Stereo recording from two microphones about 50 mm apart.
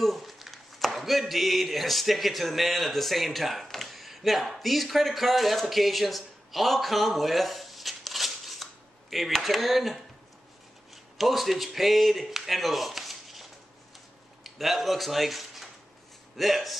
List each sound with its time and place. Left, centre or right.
0.0 s speech: centre
11.1 s speech: centre